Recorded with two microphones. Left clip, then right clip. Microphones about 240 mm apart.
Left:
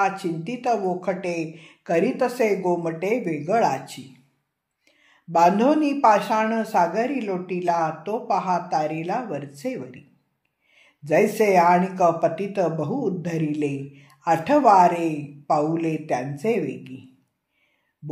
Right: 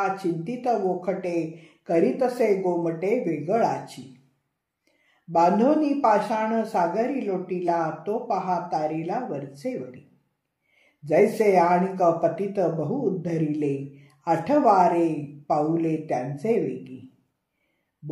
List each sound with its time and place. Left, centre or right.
0.0 s speech: left
5.3 s speech: left